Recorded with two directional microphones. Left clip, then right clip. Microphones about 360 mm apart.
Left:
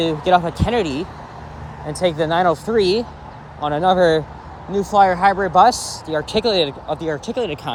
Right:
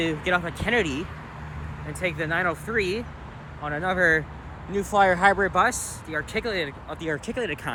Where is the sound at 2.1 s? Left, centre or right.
Centre.